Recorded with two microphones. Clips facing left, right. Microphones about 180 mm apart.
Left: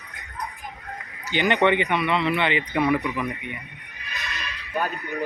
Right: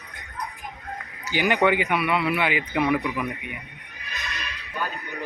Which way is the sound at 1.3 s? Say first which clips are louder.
Left 1 dB; 5° right (ahead or behind).